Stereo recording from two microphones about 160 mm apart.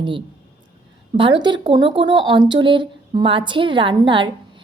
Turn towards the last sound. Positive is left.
turn(degrees=-30)  # may be behind; listen again after turning